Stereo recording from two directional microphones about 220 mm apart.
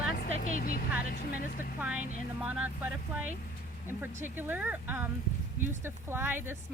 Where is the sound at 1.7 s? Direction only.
5° right (ahead or behind).